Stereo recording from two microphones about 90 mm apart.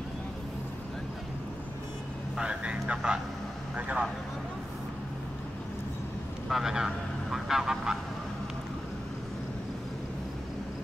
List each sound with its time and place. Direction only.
2.3 s speech: 10° right (ahead or behind)
6.5 s speech: 5° right (ahead or behind)